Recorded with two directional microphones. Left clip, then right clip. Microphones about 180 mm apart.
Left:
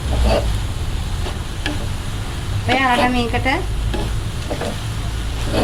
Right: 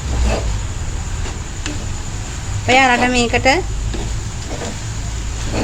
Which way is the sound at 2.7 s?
60° right (ahead or behind).